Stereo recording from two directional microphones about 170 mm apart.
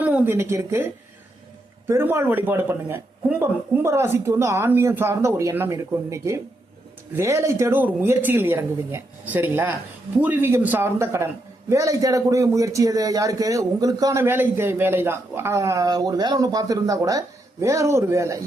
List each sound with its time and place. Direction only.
0.0 s speech: 10° right (ahead or behind)
1.9 s a man's voice: 15° right (ahead or behind)